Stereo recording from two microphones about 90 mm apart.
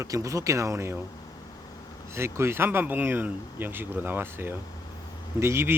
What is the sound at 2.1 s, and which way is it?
Speech, 30° right (ahead or behind).